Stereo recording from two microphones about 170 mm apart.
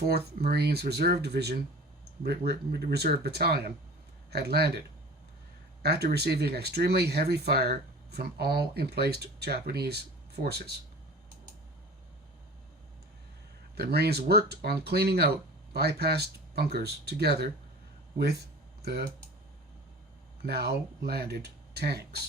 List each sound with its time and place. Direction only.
0.0 s speech: 65° right (ahead or behind)
5.8 s speech: 70° right (ahead or behind)
13.7 s speech: 70° right (ahead or behind)
18.9 s speech: 65° right (ahead or behind)
20.4 s speech: 70° right (ahead or behind)